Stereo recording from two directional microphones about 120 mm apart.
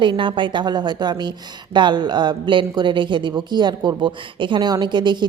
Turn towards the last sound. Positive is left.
turn(degrees=-40)  # may be behind; listen again after turning